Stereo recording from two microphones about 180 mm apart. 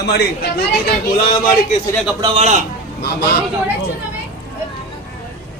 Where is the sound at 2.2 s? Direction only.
25° right (ahead or behind).